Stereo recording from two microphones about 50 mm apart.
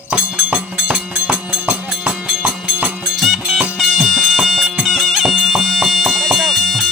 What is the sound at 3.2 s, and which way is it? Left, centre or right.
Music, centre.